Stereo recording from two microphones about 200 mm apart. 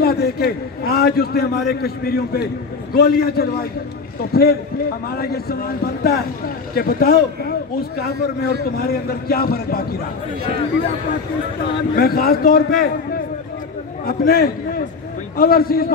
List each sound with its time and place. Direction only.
0.0 s a man's voice: 50° left (ahead or behind)
8.7 s a man's voice: 50° left (ahead or behind)
11.9 s a man's voice: 50° left (ahead or behind)
14.0 s a man's voice: 50° left (ahead or behind)